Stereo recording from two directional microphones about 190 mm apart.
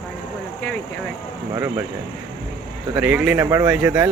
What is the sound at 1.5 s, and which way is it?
Speech, 15° right (ahead or behind).